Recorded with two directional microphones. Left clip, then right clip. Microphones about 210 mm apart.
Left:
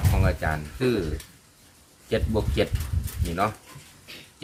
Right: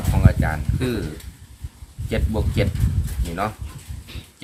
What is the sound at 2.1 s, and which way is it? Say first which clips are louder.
Speech: even; 15° right (ahead or behind).